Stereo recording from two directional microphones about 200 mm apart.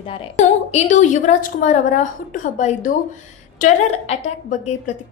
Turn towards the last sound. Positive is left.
turn(degrees=35)  # may be behind; listen again after turning